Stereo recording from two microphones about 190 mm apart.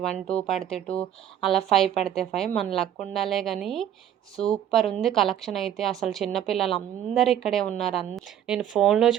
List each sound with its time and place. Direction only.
0.0 s speech: 5° left (ahead or behind)
2.7 s speech: 30° left (ahead or behind)
3.1 s speech: centre (ahead or behind)